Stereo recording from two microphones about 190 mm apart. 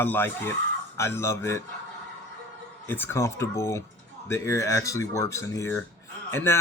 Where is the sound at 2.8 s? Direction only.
10° left (ahead or behind).